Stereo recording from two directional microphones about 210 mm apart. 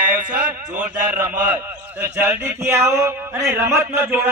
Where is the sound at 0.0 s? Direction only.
40° right (ahead or behind).